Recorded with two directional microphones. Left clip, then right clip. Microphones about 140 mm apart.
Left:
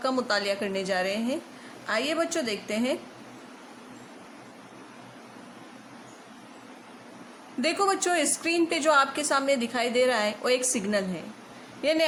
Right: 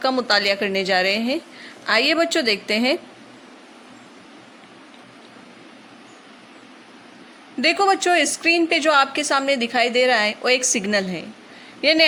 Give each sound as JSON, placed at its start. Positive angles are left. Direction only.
{"t": 0.0, "sound": "a woman's voice", "side_deg": -30}
{"t": 7.6, "sound": "a woman's voice", "side_deg": -25}